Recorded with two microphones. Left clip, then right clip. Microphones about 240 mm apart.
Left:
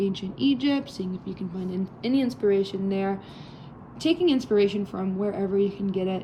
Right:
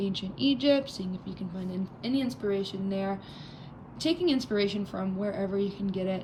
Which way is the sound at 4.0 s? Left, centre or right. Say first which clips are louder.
Left 4 dB; centre.